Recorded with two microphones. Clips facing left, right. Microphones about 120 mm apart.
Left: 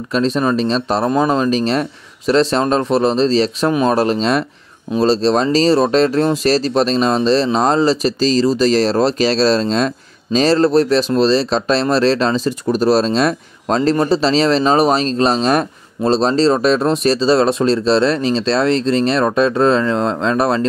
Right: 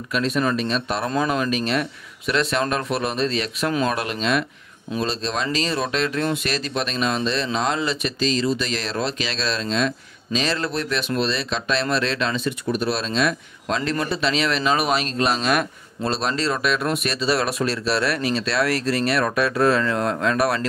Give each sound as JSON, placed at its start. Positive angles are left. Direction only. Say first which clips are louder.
{"t": 0.1, "sound": "speech", "louder": "left 6 dB", "side_deg": 30}